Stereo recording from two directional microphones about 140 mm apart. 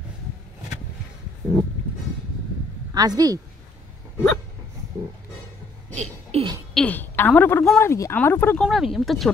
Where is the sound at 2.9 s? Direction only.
30° right (ahead or behind).